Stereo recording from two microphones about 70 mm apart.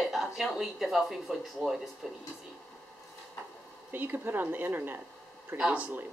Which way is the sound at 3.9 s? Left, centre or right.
Right.